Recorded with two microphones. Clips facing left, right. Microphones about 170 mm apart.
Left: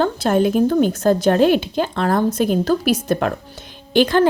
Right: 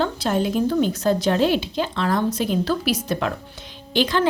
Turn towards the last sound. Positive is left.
turn(degrees=50)  # may be behind; listen again after turning